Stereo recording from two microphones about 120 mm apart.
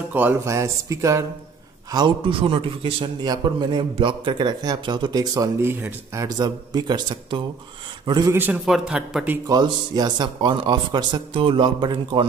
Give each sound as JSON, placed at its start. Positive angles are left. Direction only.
{"t": 0.1, "sound": "speech", "side_deg": -15}
{"t": 0.5, "sound": "speech", "side_deg": -25}
{"t": 1.9, "sound": "a man's voice", "side_deg": -40}
{"t": 5.6, "sound": "speech", "side_deg": -20}
{"t": 6.2, "sound": "a man's voice", "side_deg": -35}
{"t": 8.3, "sound": "a man's voice", "side_deg": -15}
{"t": 8.6, "sound": "a man's voice", "side_deg": -5}
{"t": 9.5, "sound": "a man's voice", "side_deg": -35}